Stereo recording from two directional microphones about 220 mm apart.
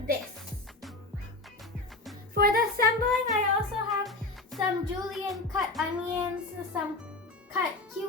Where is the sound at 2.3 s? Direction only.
45° right (ahead or behind).